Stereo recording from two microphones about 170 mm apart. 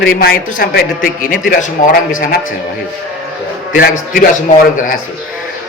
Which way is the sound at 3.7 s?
60° left (ahead or behind).